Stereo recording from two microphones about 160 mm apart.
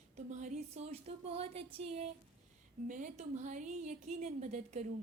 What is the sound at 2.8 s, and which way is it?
Speech, 55° right (ahead or behind).